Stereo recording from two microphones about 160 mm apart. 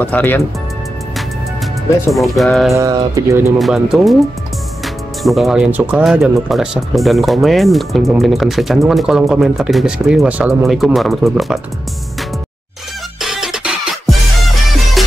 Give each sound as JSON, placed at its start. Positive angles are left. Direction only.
{"t": 0.0, "sound": "speech", "side_deg": 10}
{"t": 2.0, "sound": "speech", "side_deg": 0}
{"t": 2.7, "sound": "speech", "side_deg": -20}
{"t": 3.5, "sound": "speech", "side_deg": 0}
{"t": 13.2, "sound": "music", "side_deg": -5}